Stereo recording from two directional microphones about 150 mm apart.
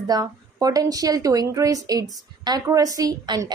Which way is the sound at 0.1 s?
25° right (ahead or behind).